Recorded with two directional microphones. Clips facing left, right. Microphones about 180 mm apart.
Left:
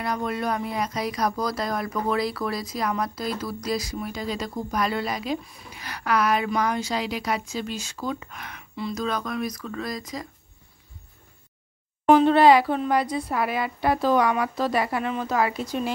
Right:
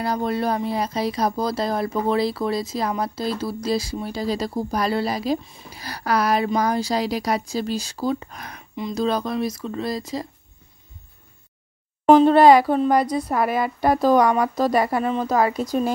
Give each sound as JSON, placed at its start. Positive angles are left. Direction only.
{"t": 0.0, "sound": "speech", "side_deg": -30}
{"t": 12.1, "sound": "speech", "side_deg": -40}